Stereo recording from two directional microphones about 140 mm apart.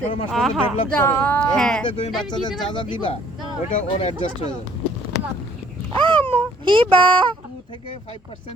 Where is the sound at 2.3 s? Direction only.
30° left (ahead or behind).